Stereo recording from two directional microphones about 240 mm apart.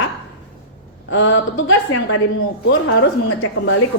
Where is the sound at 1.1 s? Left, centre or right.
Left.